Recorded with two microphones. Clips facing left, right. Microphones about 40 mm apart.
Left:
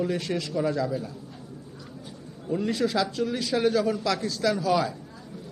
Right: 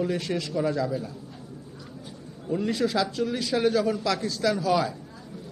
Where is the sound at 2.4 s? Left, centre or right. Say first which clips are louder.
Even; centre.